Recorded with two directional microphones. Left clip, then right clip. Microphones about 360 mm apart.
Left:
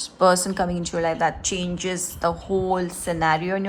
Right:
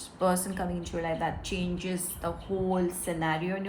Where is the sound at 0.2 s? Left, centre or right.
Left.